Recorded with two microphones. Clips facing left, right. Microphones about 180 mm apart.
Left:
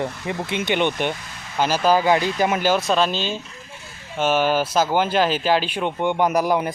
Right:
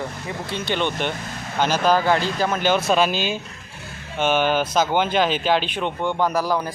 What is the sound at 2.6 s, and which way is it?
Speech, 5° left (ahead or behind).